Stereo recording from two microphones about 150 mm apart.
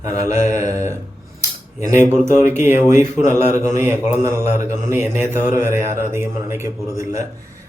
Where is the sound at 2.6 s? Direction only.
15° right (ahead or behind).